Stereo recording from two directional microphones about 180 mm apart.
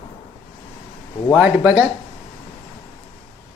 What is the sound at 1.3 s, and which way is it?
Speech, 10° right (ahead or behind).